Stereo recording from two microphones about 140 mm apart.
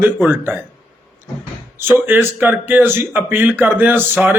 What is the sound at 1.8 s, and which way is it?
Speech, 15° right (ahead or behind).